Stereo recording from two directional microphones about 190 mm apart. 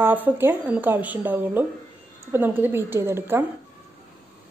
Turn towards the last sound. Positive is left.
turn(degrees=-10)  # may be behind; listen again after turning